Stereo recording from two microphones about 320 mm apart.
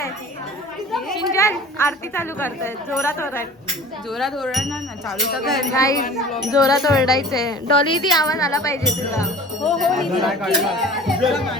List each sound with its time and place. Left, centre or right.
0.9 s a woman's voice: centre
5.7 s speech: centre